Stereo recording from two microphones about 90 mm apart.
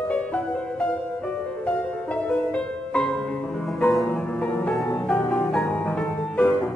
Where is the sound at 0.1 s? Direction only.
15° left (ahead or behind).